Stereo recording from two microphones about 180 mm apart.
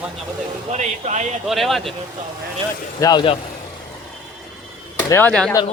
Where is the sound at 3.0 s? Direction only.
20° left (ahead or behind).